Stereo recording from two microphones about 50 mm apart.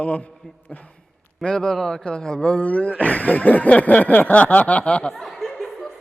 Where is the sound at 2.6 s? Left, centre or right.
Left.